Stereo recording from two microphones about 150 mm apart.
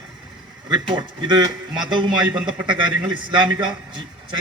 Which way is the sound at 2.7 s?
30° right (ahead or behind).